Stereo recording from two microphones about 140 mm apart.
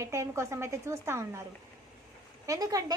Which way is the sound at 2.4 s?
25° right (ahead or behind).